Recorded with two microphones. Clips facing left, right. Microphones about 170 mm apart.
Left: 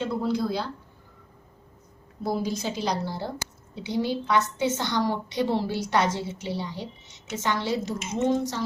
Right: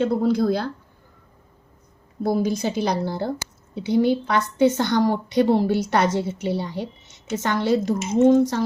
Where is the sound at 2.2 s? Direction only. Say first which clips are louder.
Right 6 dB; 55° right (ahead or behind).